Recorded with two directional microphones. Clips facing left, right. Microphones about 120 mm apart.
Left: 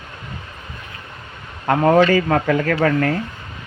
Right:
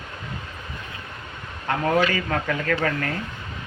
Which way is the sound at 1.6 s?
45° left (ahead or behind).